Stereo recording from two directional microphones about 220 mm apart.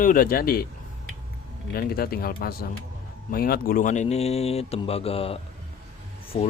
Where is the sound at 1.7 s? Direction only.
45° left (ahead or behind).